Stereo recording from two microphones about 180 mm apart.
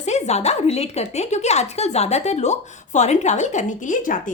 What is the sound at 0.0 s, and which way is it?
Speech, 40° left (ahead or behind).